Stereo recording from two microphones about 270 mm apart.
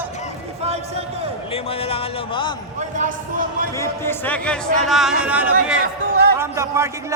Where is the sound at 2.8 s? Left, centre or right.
Right.